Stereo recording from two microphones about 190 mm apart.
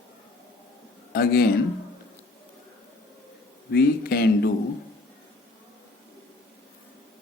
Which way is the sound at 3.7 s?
55° left (ahead or behind).